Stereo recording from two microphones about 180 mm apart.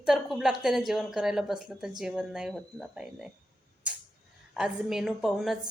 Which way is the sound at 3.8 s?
5° right (ahead or behind).